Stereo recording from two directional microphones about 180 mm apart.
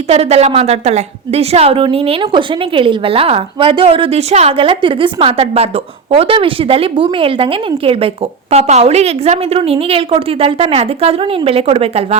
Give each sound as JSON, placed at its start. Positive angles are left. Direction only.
{"t": 0.1, "sound": "a woman's voice", "side_deg": -35}